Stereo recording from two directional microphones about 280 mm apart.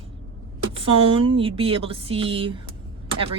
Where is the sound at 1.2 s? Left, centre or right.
Centre.